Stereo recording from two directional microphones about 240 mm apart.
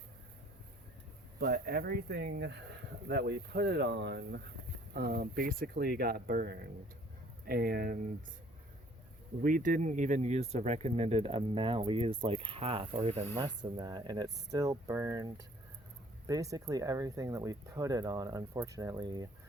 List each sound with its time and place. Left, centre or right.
1.4 s speech: right
9.4 s speech: right; by 19.3 s centre